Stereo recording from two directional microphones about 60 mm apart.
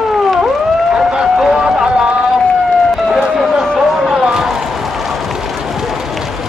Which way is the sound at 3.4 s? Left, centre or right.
Centre.